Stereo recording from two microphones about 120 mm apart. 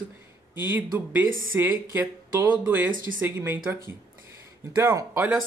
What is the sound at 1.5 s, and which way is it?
Speech, 20° right (ahead or behind).